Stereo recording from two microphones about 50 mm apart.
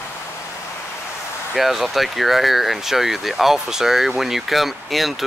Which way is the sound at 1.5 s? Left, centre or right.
Centre.